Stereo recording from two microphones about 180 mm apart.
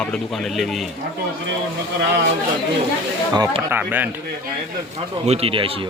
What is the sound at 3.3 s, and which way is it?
Speech, 20° right (ahead or behind).